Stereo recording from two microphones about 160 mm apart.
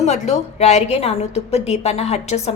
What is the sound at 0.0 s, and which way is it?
A woman's voice, 45° left (ahead or behind).